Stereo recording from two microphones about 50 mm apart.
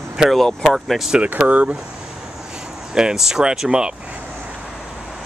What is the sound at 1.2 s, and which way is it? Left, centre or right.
Speech, right.